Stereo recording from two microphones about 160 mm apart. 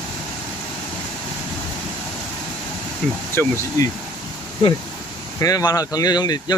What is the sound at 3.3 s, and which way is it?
Speech, 15° left (ahead or behind).